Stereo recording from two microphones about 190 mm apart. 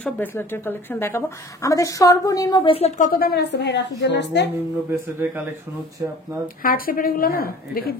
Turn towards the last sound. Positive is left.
turn(degrees=50)  # may be behind; listen again after turning